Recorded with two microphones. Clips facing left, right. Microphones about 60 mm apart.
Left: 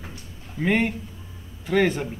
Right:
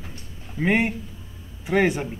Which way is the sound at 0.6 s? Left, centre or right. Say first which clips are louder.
Right 1 dB; centre.